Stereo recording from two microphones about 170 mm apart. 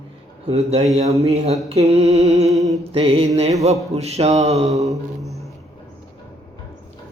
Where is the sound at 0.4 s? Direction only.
35° right (ahead or behind).